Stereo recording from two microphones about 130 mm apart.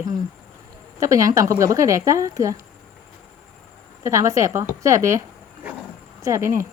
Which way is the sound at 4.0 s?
25° right (ahead or behind).